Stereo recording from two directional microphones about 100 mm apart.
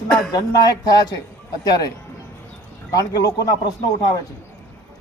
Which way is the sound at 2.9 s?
40° left (ahead or behind).